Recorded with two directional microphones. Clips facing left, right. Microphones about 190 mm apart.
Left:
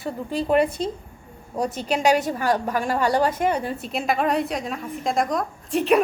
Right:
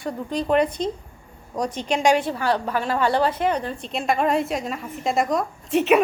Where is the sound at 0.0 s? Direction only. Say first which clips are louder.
Even; 5° left (ahead or behind).